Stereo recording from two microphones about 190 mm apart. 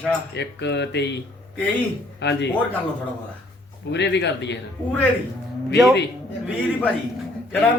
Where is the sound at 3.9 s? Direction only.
65° left (ahead or behind).